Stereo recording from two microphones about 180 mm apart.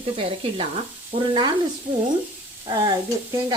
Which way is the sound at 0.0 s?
30° right (ahead or behind).